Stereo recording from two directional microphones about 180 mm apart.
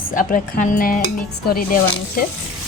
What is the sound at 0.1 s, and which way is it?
Speech, 50° left (ahead or behind).